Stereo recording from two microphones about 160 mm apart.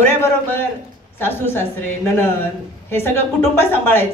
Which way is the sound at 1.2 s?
15° left (ahead or behind).